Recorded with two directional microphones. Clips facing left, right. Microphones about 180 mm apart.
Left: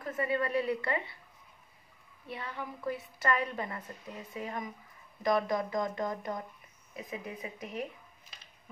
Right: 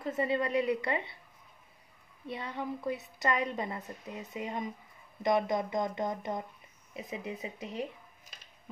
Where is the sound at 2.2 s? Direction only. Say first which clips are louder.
Right 3 dB; 20° right (ahead or behind).